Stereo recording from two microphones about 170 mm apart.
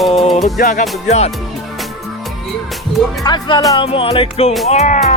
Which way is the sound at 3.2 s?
25° left (ahead or behind).